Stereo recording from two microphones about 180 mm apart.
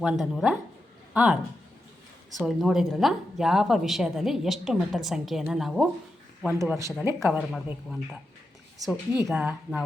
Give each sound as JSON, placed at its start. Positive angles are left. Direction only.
{"t": 0.0, "sound": "speech", "side_deg": 0}
{"t": 2.4, "sound": "speech", "side_deg": 0}
{"t": 6.5, "sound": "a woman's voice", "side_deg": -15}
{"t": 7.2, "sound": "a woman's voice", "side_deg": -5}
{"t": 9.2, "sound": "speech", "side_deg": -5}